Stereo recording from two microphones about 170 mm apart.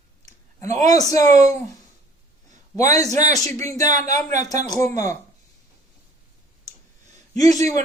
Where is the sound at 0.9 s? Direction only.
20° left (ahead or behind).